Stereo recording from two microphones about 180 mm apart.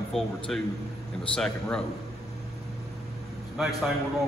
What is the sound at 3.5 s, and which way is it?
Speech, centre (ahead or behind).